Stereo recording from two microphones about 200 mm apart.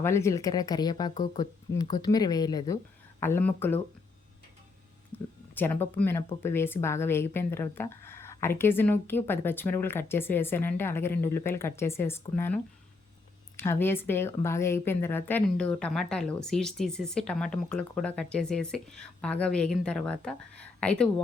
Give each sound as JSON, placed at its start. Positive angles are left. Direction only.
{"t": 0.0, "sound": "speech", "side_deg": 15}
{"t": 5.5, "sound": "speech", "side_deg": 10}
{"t": 13.6, "sound": "a woman's voice", "side_deg": 10}